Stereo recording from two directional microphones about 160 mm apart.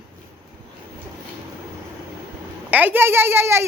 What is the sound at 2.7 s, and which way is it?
Speech, 10° right (ahead or behind).